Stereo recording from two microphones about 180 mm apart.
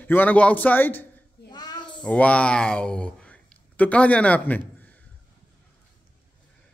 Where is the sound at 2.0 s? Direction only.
5° left (ahead or behind).